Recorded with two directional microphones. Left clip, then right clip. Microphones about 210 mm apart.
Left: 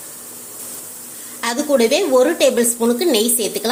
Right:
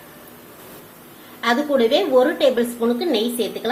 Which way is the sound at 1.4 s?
30° left (ahead or behind).